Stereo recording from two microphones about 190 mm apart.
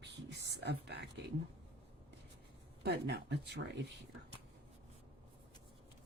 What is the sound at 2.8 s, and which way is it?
Speech, 60° right (ahead or behind).